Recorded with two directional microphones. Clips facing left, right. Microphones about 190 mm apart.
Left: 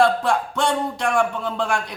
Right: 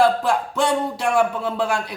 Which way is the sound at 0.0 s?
5° right (ahead or behind).